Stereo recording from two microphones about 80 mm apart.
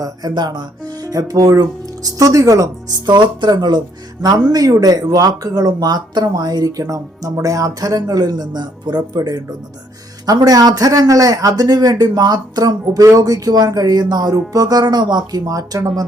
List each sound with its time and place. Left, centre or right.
0.0 s a man's voice: right
3.1 s a man's voice: right